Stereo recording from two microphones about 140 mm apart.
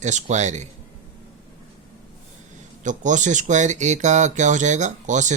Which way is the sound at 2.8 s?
60° right (ahead or behind).